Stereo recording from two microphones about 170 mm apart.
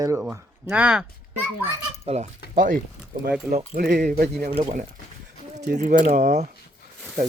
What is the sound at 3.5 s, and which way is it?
Speech, 10° right (ahead or behind).